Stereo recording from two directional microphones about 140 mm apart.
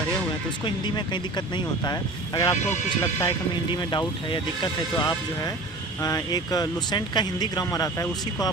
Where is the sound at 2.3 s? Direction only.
25° left (ahead or behind).